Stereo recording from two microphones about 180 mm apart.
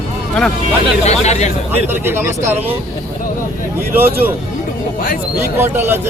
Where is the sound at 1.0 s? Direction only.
35° left (ahead or behind).